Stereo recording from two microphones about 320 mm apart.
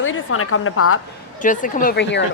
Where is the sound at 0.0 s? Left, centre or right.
Left.